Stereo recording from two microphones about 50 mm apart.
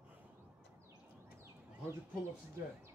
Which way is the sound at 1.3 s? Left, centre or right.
Right.